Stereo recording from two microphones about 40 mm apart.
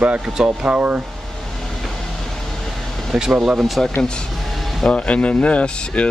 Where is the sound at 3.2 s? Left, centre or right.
Centre.